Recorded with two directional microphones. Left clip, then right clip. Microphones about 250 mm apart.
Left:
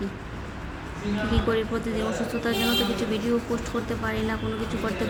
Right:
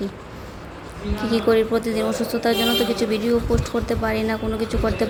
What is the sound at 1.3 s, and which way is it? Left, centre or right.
A woman's voice, centre.